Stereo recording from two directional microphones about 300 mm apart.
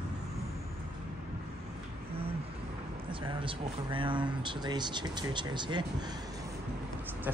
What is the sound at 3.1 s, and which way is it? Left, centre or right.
Speech, centre.